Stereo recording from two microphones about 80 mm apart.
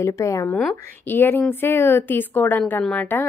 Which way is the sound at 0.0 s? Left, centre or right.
Left.